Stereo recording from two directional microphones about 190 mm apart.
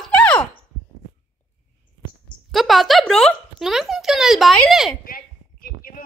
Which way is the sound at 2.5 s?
Centre (ahead or behind).